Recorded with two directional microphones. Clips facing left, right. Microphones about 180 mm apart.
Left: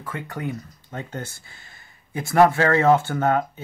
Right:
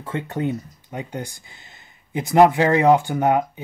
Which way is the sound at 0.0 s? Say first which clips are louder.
Right 6 dB; 25° right (ahead or behind).